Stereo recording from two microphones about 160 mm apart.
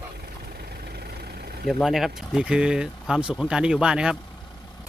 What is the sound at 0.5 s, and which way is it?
Vehicle, 80° right.